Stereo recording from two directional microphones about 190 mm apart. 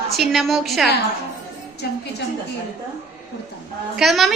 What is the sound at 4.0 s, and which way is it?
Speech, centre (ahead or behind).